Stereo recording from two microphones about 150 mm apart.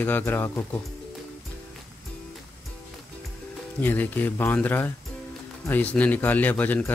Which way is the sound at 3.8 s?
10° left (ahead or behind).